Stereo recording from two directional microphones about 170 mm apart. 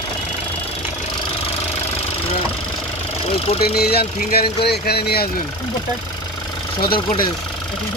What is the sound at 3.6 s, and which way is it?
Speech, 65° left (ahead or behind).